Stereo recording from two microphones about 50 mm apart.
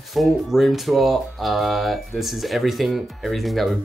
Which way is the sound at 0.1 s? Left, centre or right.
Centre.